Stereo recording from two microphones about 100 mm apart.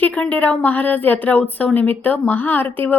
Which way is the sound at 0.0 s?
15° left (ahead or behind).